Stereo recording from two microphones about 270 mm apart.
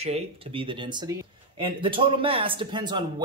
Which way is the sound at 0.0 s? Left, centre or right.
Right.